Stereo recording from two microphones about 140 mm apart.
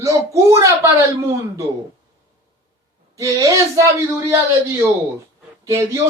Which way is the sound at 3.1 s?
25° right (ahead or behind).